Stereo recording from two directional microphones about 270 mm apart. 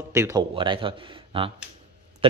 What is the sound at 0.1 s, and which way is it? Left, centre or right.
Speech, centre.